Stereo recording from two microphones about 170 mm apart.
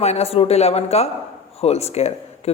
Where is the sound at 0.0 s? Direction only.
40° left (ahead or behind).